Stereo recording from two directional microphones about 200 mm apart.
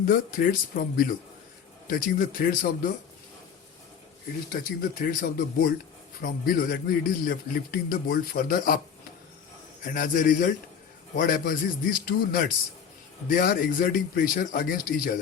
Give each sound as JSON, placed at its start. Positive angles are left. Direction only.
{"t": 0.0, "sound": "speech", "side_deg": 45}
{"t": 4.8, "sound": "speech", "side_deg": 45}
{"t": 9.8, "sound": "speech", "side_deg": 45}